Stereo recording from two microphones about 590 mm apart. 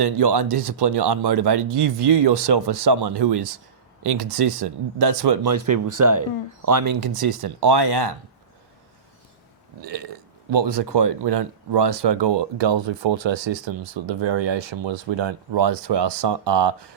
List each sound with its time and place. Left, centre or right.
0.0 s speech: right
9.8 s speech: right